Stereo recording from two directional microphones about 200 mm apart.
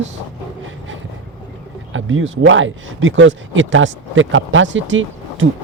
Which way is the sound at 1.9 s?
75° right (ahead or behind).